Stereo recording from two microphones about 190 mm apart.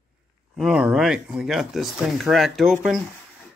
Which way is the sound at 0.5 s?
5° right (ahead or behind).